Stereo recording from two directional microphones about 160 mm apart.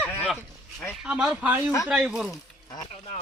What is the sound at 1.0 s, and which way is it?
Speech, 5° right (ahead or behind).